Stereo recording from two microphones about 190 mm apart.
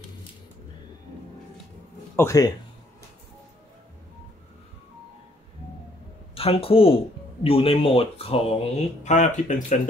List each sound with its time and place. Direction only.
2.1 s speech: 15° left (ahead or behind)
6.3 s speech: 30° left (ahead or behind)